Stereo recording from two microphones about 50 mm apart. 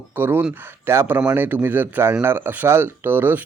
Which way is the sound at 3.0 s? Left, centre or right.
Right.